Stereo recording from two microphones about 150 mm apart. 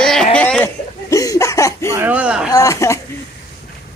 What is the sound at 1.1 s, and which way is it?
Laughter, 20° left (ahead or behind).